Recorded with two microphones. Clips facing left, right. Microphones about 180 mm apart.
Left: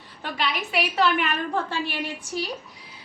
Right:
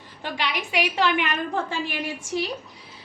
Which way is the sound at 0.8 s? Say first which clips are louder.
Even; 40° left (ahead or behind).